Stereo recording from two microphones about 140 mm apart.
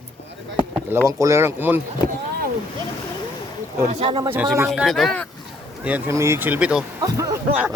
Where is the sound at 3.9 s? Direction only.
40° right (ahead or behind).